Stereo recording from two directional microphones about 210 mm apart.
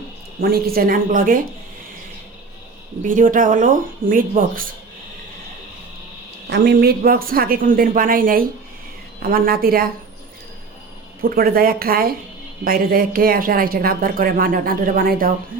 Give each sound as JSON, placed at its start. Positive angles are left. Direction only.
{"t": 0.4, "sound": "speech", "side_deg": -45}
{"t": 3.0, "sound": "speech", "side_deg": -40}
{"t": 6.5, "sound": "speech", "side_deg": -50}
{"t": 11.2, "sound": "speech", "side_deg": -45}